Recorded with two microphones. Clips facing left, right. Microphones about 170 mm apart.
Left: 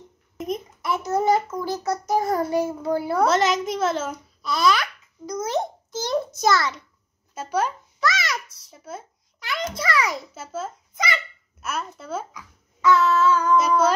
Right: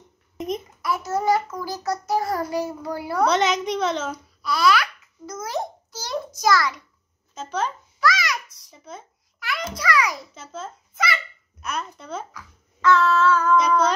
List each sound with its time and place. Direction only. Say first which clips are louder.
0.8 s child singing: left 1 dB; 20° left (ahead or behind)
3.3 s a child's voice: right 3 dB; centre (ahead or behind)
4.4 s babbling: right 1 dB; 20° left (ahead or behind)
7.3 s speech: left 2 dB; 10° left (ahead or behind)
8.0 s babbling: right 2 dB; 25° left (ahead or behind)
8.6 s speech: left 3 dB; 5° left (ahead or behind)
9.4 s a sound: left 1 dB; 20° left (ahead or behind)
9.8 s a child's voice: right 2 dB; 25° left (ahead or behind)
10.3 s a child's voice: left 4 dB; 10° left (ahead or behind)